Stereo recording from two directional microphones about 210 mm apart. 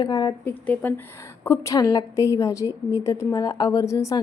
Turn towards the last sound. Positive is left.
turn(degrees=15)  # may be behind; listen again after turning